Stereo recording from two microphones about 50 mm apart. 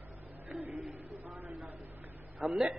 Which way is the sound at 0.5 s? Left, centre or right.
Right.